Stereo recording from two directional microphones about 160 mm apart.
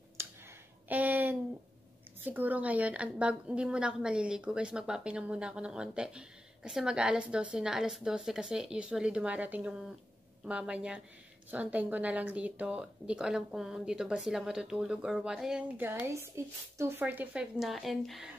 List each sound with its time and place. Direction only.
0.8 s a sound: 10° right (ahead or behind)
2.2 s a woman's voice: 10° right (ahead or behind)
15.9 s a woman's voice: 15° right (ahead or behind); by 18.3 s centre (ahead or behind)